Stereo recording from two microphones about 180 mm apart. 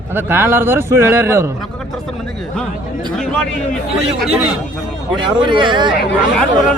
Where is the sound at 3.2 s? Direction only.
Centre (ahead or behind).